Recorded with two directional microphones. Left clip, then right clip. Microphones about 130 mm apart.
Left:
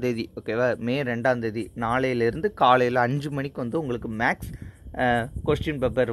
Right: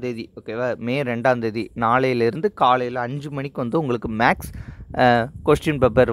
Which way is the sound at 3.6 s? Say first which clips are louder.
Right 8 dB; 35° right (ahead or behind).